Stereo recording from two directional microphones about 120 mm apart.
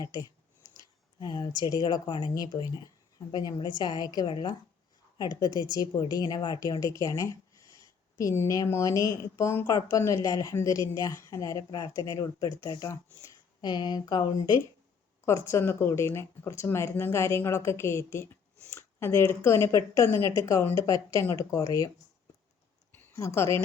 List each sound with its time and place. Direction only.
1.2 s speech: 35° left (ahead or behind)
13.6 s speech: 35° left (ahead or behind)
15.3 s speech: 25° left (ahead or behind)
22.9 s a sound: 25° left (ahead or behind)